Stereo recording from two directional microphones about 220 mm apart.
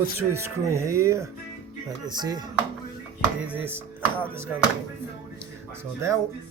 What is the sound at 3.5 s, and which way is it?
Speech, 10° right (ahead or behind).